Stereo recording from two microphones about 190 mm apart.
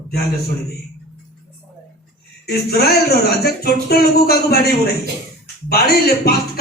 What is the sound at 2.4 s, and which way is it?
Speech, 55° left (ahead or behind).